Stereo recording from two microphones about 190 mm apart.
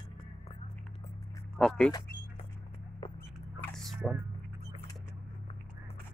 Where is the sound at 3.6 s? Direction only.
Centre (ahead or behind).